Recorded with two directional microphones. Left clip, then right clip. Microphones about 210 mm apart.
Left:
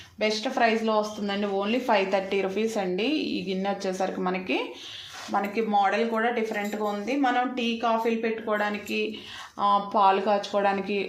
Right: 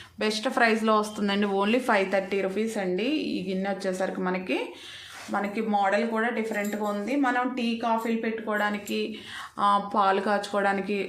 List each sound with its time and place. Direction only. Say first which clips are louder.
0.2 s speech: even; 15° right (ahead or behind)
0.9 s speech: right 1 dB; 30° right (ahead or behind); by 11.0 s 10° right (ahead or behind)